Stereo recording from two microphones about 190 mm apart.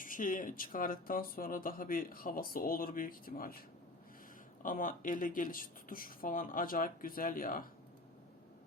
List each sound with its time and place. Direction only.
0.0 s speech: 45° left (ahead or behind)
4.6 s speech: 45° left (ahead or behind)